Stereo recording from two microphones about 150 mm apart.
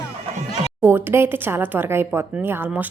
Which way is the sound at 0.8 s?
15° right (ahead or behind).